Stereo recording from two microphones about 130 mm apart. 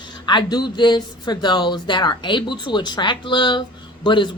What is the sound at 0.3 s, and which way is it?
Speech, 35° left (ahead or behind).